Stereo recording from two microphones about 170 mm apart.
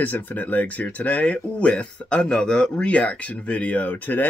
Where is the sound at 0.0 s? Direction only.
10° left (ahead or behind).